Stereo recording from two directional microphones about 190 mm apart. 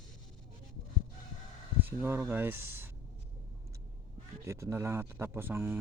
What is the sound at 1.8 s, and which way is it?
Speech, 10° right (ahead or behind).